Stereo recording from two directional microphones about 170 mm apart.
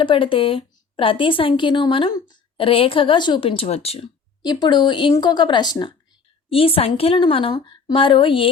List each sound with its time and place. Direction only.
0.0 s a woman's voice: 30° left (ahead or behind)
4.4 s a woman's voice: 25° left (ahead or behind)